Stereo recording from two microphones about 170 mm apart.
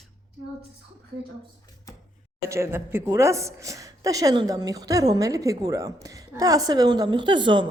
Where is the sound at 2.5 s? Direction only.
15° right (ahead or behind).